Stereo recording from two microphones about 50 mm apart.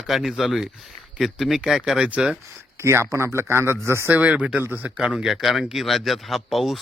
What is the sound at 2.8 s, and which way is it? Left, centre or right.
A man's voice, right.